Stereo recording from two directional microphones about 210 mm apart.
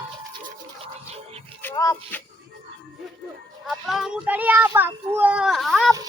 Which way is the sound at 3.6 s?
Centre (ahead or behind).